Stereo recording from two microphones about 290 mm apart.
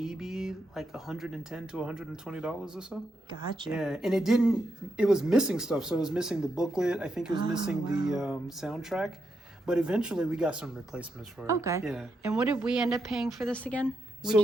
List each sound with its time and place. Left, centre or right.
0.0 s speech: centre
3.2 s a woman's voice: centre
3.7 s speech: centre